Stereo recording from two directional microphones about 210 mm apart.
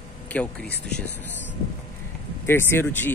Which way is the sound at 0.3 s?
5° left (ahead or behind).